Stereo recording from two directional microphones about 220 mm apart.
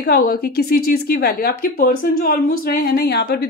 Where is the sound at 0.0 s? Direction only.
45° left (ahead or behind).